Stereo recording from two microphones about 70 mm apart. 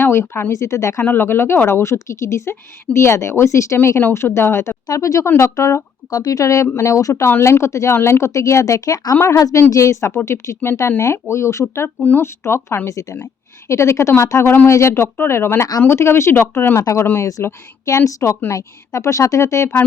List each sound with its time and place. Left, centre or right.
0.0 s speech: left
0.5 s a woman's voice: left
1.0 s a woman's voice: left
4.9 s a woman's voice: left
6.1 s speech: left
6.4 s a woman's voice: left
11.9 s speech: left
12.2 s speech: left
12.9 s a woman's voice: left
13.1 s a woman's voice: left
17.8 s a woman's voice: left
18.5 s a woman's voice: left